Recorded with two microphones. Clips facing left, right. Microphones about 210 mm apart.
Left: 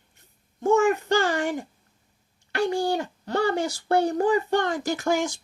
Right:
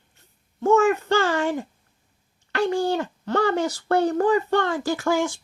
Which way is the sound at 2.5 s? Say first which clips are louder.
Right 2 dB; 15° left (ahead or behind).